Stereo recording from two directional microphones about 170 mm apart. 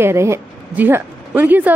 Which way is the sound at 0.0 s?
15° right (ahead or behind).